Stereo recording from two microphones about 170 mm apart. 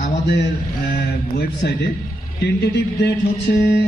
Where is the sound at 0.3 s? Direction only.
90° left.